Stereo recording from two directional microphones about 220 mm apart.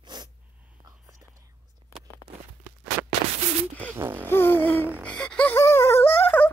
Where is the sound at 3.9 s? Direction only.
10° right (ahead or behind).